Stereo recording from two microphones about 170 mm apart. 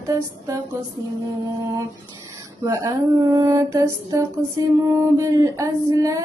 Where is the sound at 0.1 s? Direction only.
20° right (ahead or behind).